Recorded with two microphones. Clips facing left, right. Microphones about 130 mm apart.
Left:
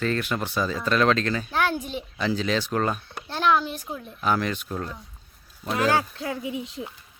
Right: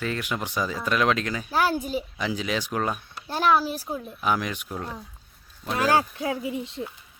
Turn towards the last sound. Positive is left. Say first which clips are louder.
# right 1 dB
turn(degrees=0)  # may be behind; listen again after turning